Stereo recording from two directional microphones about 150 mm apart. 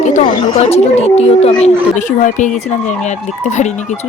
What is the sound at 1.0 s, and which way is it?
Speech, 45° left (ahead or behind).